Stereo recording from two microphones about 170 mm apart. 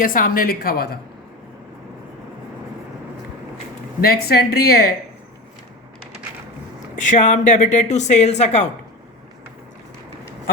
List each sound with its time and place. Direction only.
0.0 s speech: 55° left (ahead or behind)
4.0 s speech: 65° left (ahead or behind)
6.9 s speech: 45° left (ahead or behind)